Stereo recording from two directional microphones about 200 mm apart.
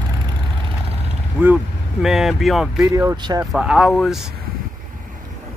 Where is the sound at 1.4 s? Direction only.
10° right (ahead or behind).